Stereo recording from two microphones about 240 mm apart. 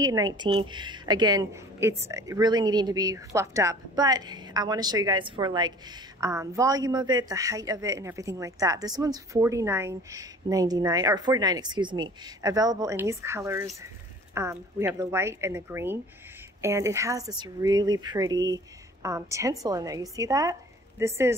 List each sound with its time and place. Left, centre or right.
0.0 s a woman's voice: centre